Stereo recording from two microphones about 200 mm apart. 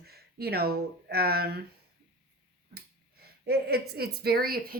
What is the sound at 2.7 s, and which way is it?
Speech, 50° right (ahead or behind).